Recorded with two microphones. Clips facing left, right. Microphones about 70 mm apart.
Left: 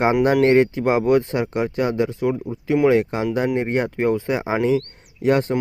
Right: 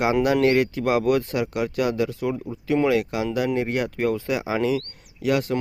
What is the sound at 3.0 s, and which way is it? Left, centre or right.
Speech, left.